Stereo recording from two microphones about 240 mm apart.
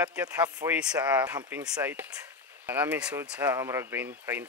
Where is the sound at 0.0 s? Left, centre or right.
Centre.